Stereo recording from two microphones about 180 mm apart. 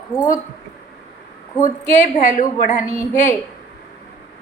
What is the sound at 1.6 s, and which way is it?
A woman's voice, 45° left (ahead or behind).